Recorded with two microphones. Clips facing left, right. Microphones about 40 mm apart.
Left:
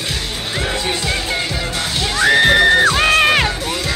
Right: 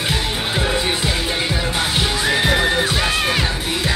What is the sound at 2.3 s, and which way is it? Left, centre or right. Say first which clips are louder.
Music: left 8 dB; left.